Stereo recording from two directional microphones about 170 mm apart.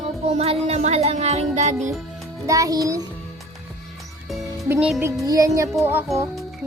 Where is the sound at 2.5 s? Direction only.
20° right (ahead or behind).